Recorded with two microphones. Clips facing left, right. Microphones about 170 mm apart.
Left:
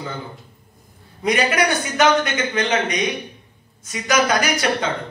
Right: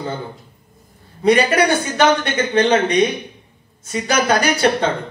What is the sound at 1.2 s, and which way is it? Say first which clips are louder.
A man's voice: right 5 dB; 30° right (ahead or behind).